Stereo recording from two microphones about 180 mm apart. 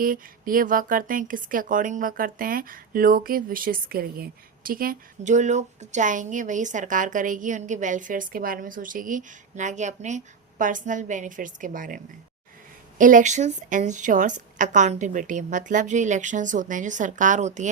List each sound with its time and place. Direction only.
0.0 s speech: 50° right (ahead or behind)